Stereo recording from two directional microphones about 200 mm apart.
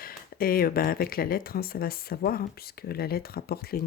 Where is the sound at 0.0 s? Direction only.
45° left (ahead or behind).